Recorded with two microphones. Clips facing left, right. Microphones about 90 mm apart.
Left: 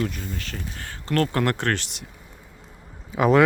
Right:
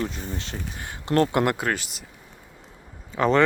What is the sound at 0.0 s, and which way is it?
Speech, 25° right (ahead or behind).